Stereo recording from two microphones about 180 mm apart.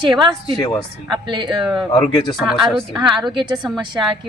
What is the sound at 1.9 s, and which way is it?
Speech, 25° left (ahead or behind).